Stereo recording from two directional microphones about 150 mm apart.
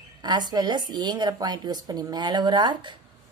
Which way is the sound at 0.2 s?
30° right (ahead or behind).